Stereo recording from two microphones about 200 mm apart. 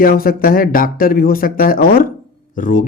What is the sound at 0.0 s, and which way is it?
Speech, 45° left (ahead or behind).